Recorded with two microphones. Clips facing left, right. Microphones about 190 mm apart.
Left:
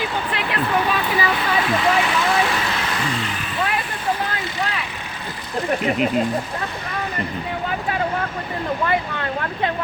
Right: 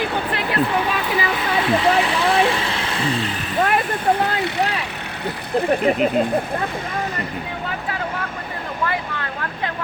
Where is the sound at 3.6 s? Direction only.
55° right (ahead or behind).